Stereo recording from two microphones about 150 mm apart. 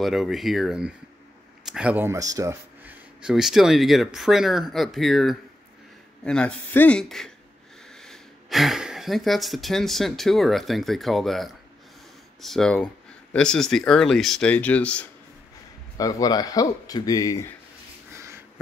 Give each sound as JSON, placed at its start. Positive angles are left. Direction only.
{"t": 0.0, "sound": "speech", "side_deg": 0}
{"t": 2.8, "sound": "speech", "side_deg": -10}
{"t": 16.0, "sound": "speech", "side_deg": 25}
{"t": 18.1, "sound": "a sound", "side_deg": -15}